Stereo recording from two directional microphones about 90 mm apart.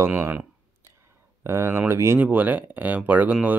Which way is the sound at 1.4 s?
30° right (ahead or behind).